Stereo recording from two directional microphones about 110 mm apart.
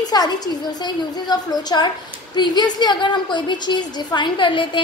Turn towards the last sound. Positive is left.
turn(degrees=50)  # may be behind; listen again after turning